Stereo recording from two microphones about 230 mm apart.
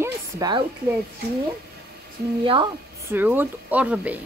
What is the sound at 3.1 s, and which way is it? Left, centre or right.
Speech, centre.